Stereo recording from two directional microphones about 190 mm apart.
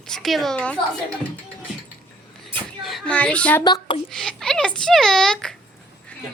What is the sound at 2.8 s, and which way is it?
Speech, 5° left (ahead or behind).